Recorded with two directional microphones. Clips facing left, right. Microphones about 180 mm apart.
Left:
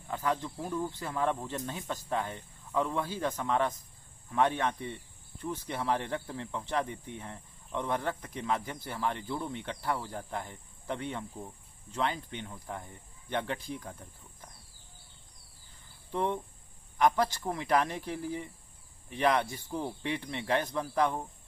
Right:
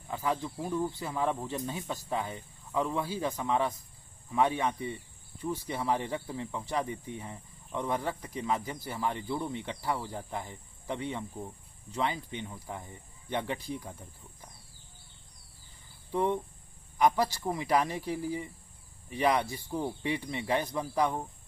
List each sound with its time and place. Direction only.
0.4 s speech: 10° right (ahead or behind)
2.1 s speech: 5° right (ahead or behind)
16.1 s speech: 5° right (ahead or behind)